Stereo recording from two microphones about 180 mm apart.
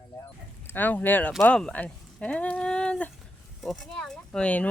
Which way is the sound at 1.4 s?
5° left (ahead or behind).